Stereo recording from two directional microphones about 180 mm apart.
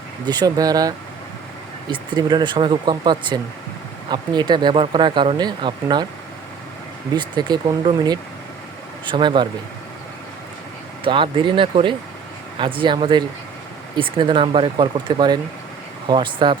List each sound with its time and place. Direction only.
0.3 s speech: 20° right (ahead or behind)
7.1 s speech: 25° right (ahead or behind)
11.0 s speech: 30° right (ahead or behind)